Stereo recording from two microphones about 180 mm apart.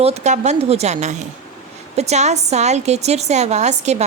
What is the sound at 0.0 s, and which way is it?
A woman's voice, 35° right (ahead or behind).